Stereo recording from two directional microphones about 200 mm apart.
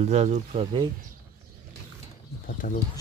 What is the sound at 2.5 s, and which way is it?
Speech, 45° left (ahead or behind).